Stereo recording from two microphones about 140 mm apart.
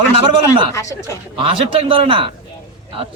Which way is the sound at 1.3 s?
40° right (ahead or behind).